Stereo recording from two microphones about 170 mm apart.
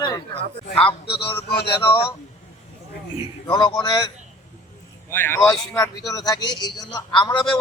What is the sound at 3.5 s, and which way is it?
Speech, 25° left (ahead or behind).